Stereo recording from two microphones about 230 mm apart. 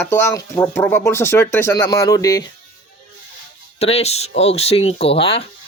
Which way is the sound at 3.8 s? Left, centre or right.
Left.